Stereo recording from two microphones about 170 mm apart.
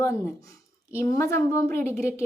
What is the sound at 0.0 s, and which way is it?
Speech, 15° left (ahead or behind).